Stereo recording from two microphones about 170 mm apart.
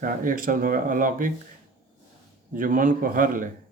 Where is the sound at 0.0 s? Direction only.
55° right (ahead or behind).